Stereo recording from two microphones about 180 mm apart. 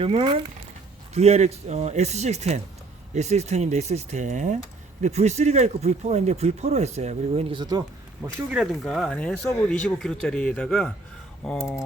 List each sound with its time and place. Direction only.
0.0 s speech: 30° right (ahead or behind)
8.4 s speech: centre (ahead or behind)